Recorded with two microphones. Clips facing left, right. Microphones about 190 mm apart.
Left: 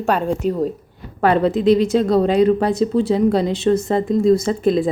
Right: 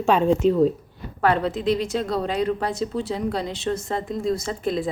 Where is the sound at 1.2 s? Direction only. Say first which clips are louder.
Left 6 dB; 20° left (ahead or behind).